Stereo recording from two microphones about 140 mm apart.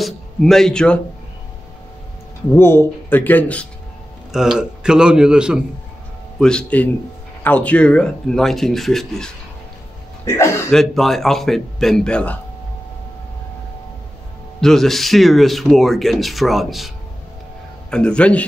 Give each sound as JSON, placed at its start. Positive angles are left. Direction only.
{"t": 0.0, "sound": "a sound", "side_deg": 0}
{"t": 2.5, "sound": "speech", "side_deg": 15}
{"t": 4.3, "sound": "speech", "side_deg": -5}
{"t": 6.4, "sound": "speech", "side_deg": 10}
{"t": 10.2, "sound": "speech", "side_deg": 20}
{"t": 10.7, "sound": "speech", "side_deg": 0}
{"t": 14.6, "sound": "speech", "side_deg": 0}